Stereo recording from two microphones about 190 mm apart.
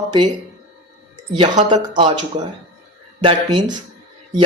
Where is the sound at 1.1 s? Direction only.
25° right (ahead or behind).